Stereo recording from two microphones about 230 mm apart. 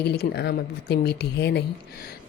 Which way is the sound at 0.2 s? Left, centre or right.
Left.